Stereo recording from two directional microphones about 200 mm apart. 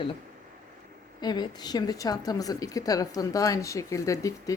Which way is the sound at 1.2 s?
20° left (ahead or behind).